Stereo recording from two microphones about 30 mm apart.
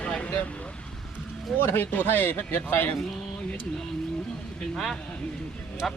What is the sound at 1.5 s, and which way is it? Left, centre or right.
Speech, centre.